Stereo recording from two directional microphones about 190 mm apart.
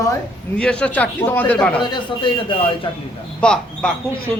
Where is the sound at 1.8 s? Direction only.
25° left (ahead or behind).